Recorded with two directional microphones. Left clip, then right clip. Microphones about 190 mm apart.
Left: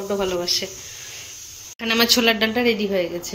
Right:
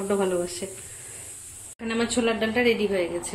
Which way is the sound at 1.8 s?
15° left (ahead or behind).